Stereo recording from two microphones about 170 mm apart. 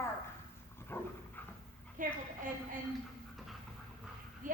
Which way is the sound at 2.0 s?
50° right (ahead or behind).